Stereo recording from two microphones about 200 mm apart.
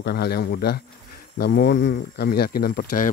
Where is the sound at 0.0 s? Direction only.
55° left (ahead or behind).